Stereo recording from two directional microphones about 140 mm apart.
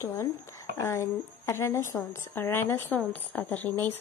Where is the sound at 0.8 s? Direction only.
20° left (ahead or behind).